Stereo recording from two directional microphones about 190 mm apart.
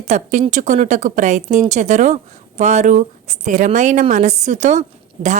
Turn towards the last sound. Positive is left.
turn(degrees=-40)  # may be behind; listen again after turning